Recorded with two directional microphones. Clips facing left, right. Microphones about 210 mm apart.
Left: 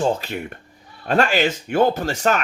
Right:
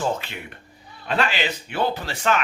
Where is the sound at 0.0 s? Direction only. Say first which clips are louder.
Left 5 dB; 35° left (ahead or behind).